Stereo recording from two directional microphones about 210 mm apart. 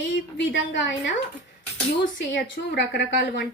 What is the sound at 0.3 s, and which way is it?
Speech, 60° left (ahead or behind).